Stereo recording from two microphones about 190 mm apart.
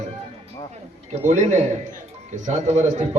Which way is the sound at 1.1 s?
40° right (ahead or behind).